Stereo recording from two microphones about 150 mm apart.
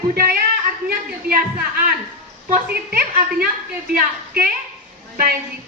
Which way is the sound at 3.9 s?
75° right (ahead or behind).